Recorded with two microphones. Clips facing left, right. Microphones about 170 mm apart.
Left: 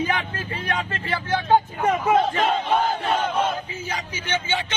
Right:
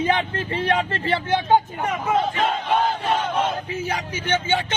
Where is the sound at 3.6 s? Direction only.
60° right (ahead or behind).